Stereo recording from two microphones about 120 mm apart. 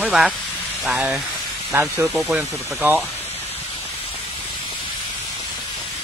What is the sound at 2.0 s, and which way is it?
Speech, centre (ahead or behind).